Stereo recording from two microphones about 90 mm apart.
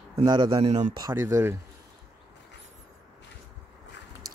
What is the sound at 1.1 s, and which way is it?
Speech, 30° right (ahead or behind).